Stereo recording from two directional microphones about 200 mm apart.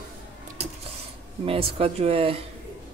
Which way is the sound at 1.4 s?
30° right (ahead or behind).